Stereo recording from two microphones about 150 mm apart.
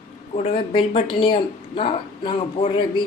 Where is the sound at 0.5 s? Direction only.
35° left (ahead or behind).